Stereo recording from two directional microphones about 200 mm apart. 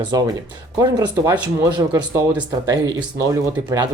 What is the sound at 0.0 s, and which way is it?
Speech, 20° right (ahead or behind).